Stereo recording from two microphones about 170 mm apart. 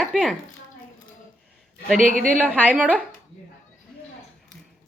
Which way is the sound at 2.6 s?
10° right (ahead or behind).